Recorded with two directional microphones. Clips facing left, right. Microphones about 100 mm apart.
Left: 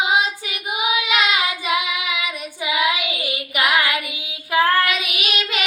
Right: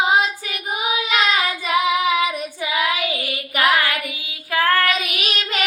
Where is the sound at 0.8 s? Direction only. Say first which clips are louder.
Even; 40° right (ahead or behind).